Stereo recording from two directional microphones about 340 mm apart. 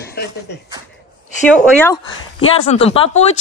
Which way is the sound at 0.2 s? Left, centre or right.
Left.